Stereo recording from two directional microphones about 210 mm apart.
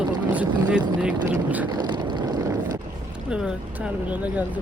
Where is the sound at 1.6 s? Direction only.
20° right (ahead or behind).